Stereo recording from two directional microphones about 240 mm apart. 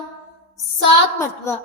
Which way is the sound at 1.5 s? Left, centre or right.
Centre.